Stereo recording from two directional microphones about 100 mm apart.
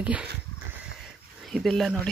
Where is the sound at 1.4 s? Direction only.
Centre (ahead or behind).